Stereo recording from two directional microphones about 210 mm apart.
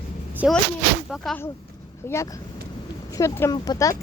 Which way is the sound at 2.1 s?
15° left (ahead or behind).